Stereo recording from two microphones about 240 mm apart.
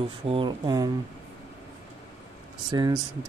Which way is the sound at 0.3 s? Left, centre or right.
Centre.